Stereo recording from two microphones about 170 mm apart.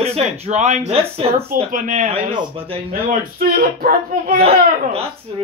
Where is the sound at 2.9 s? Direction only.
55° right (ahead or behind).